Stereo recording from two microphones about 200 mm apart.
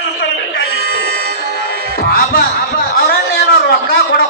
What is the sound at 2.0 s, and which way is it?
Music, 50° left (ahead or behind).